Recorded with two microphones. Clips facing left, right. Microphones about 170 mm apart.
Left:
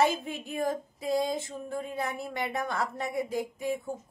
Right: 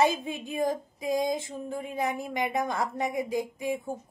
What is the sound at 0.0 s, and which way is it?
A woman's voice, 15° right (ahead or behind).